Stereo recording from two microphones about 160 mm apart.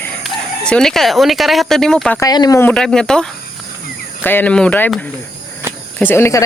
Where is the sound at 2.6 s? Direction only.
5° left (ahead or behind).